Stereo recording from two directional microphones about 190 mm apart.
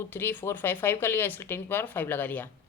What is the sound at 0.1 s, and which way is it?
A woman's voice, 10° left (ahead or behind).